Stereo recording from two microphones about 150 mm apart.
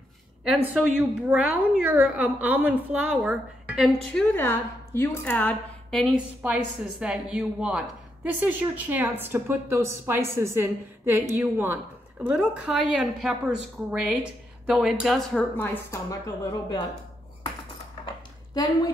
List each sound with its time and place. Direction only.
0.4 s a woman's voice: 5° right (ahead or behind)
4.1 s a woman's voice: 10° left (ahead or behind)
15.5 s a woman's voice: 15° left (ahead or behind)